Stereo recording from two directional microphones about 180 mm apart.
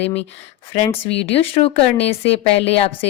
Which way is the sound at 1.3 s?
30° left (ahead or behind).